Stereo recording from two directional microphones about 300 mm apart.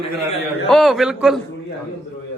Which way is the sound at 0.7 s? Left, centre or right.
Centre.